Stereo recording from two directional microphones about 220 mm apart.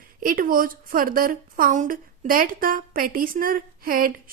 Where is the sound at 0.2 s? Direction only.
40° right (ahead or behind).